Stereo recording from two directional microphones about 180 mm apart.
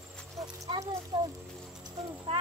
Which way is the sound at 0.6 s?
20° right (ahead or behind).